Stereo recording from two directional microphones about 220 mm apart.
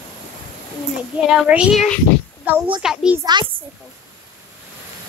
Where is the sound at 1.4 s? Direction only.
5° right (ahead or behind).